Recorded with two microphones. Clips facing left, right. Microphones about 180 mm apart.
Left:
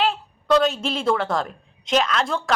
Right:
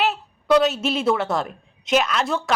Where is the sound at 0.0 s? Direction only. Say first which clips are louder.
Even; 5° right (ahead or behind).